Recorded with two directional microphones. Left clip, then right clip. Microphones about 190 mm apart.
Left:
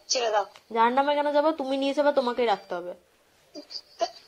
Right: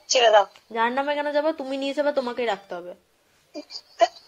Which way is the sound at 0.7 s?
Centre (ahead or behind).